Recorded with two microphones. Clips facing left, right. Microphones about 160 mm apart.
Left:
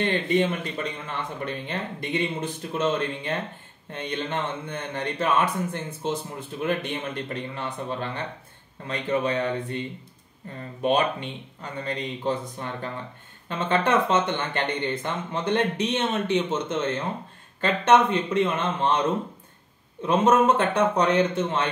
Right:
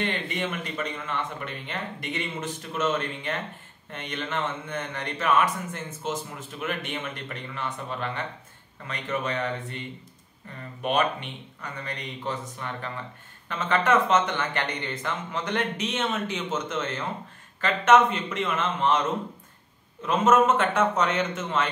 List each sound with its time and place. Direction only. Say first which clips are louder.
0.0 s speech: left 7 dB; 35° left (ahead or behind)
20.0 s speech: left 1 dB; 30° left (ahead or behind)